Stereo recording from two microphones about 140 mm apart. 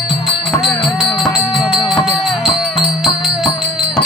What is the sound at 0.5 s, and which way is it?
Music, 25° left (ahead or behind).